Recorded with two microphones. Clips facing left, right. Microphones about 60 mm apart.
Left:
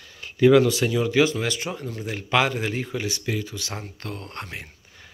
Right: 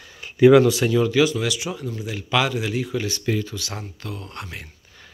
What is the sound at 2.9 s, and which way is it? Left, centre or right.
Speech, centre.